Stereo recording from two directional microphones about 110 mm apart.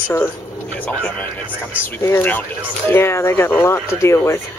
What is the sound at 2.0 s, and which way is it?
Speech, 20° left (ahead or behind).